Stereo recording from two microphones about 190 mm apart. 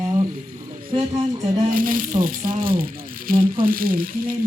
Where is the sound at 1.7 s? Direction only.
45° right (ahead or behind).